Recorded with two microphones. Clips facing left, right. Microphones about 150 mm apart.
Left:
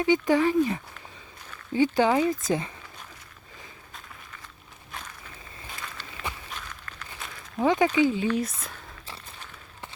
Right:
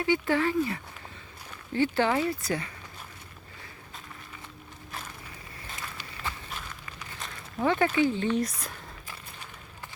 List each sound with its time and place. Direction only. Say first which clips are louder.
0.0 s speech: left 4 dB; 15° left (ahead or behind)
7.6 s speech: left 3 dB; 15° left (ahead or behind)